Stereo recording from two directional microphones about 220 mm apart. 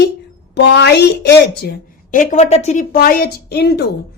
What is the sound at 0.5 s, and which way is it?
A woman's voice, 50° left (ahead or behind).